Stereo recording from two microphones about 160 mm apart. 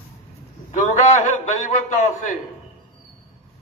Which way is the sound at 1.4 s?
50° left (ahead or behind).